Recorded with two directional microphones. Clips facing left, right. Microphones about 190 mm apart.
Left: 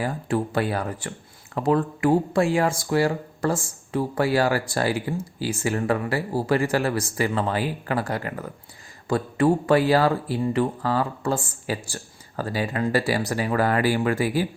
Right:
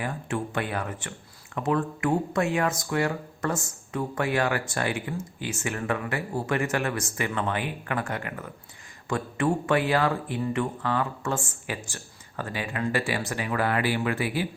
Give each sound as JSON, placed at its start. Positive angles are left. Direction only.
{"t": 0.0, "sound": "speech", "side_deg": 35}